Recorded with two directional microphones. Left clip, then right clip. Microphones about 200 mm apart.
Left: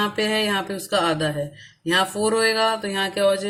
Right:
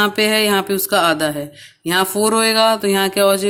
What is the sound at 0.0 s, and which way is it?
Mantra, 55° right (ahead or behind).